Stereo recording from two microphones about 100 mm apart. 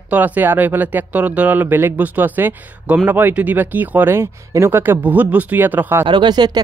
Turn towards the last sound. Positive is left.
turn(degrees=-45)  # may be behind; listen again after turning